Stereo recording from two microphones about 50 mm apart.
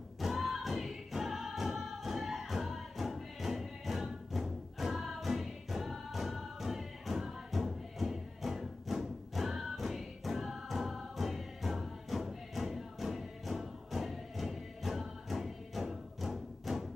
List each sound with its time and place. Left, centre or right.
0.2 s choir: centre